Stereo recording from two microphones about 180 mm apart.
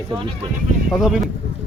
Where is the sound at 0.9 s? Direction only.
5° right (ahead or behind).